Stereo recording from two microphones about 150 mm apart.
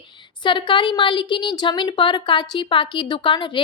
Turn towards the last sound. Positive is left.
turn(degrees=35)  # may be behind; listen again after turning